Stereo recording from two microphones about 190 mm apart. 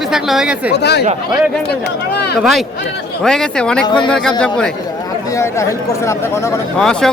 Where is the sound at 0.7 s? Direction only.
60° left (ahead or behind).